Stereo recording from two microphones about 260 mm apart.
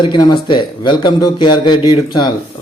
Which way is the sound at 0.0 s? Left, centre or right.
Centre.